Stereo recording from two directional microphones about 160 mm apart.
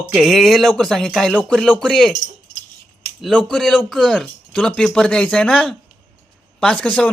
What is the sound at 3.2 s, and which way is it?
Speech, 5° left (ahead or behind).